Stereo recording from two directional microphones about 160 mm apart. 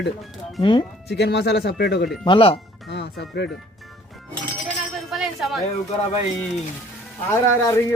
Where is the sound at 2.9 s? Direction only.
90° left.